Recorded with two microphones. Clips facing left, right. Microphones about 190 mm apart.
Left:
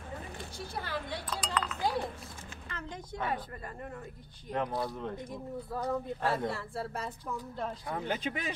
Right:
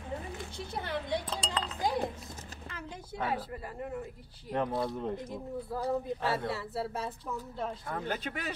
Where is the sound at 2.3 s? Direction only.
40° right (ahead or behind).